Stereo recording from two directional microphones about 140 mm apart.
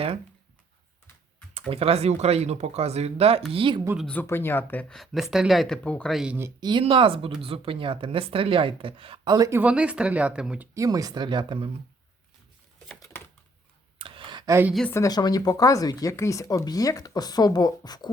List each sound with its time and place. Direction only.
1.5 s speech: 45° right (ahead or behind)
3.9 s speech: 10° left (ahead or behind)
6.6 s speech: 35° right (ahead or behind)
9.3 s speech: 25° right (ahead or behind)
9.6 s speech: 10° right (ahead or behind)
10.8 s speech: 25° right (ahead or behind)
14.0 s a sound: 40° right (ahead or behind)
14.8 s speech: 20° left (ahead or behind)